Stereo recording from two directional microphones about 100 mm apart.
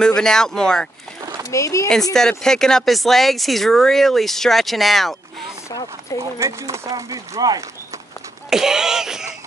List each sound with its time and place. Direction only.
0.0 s speech: 5° left (ahead or behind)
1.5 s speech: 30° left (ahead or behind)
2.1 s speech: 5° left (ahead or behind)
6.1 s speech: 30° right (ahead or behind)
8.5 s speech: 5° right (ahead or behind)